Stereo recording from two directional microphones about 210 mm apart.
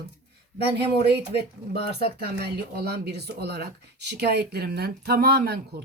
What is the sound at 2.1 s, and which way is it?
Speech, 50° right (ahead or behind).